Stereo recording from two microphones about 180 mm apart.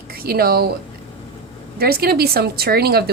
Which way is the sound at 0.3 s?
60° right (ahead or behind).